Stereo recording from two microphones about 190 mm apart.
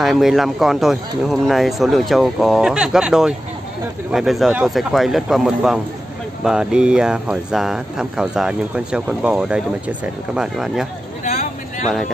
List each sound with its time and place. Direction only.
0.0 s speech: centre (ahead or behind)
11.2 s vehicle: 40° left (ahead or behind)